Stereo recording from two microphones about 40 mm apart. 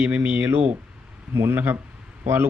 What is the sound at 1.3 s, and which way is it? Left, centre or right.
Speech, right.